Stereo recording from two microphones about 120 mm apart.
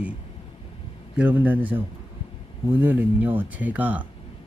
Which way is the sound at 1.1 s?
15° right (ahead or behind).